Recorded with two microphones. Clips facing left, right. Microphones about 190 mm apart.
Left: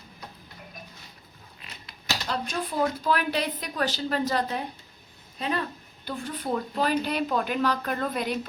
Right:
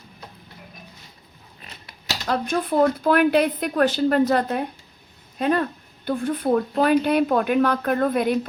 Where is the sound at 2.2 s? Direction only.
55° right (ahead or behind).